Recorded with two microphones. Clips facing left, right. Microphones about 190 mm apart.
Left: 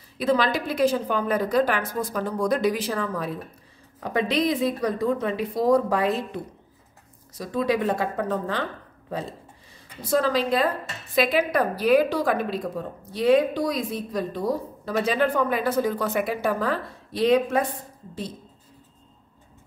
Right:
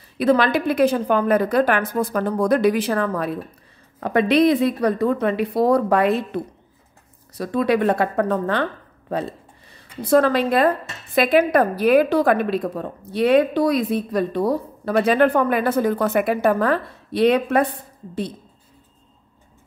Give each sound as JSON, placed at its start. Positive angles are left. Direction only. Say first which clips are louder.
{"t": 0.2, "sound": "a woman's voice", "louder": "right 5 dB", "side_deg": -60}
{"t": 10.0, "sound": "a woman's voice", "louder": "right 6 dB", "side_deg": -60}